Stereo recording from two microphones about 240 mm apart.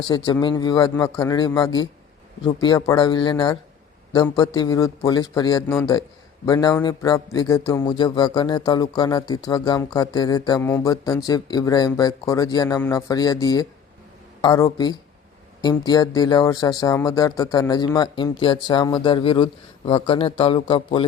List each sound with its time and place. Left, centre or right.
0.1 s a man's voice: centre